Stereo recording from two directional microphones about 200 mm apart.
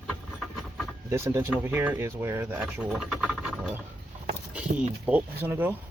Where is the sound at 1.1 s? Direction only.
15° right (ahead or behind).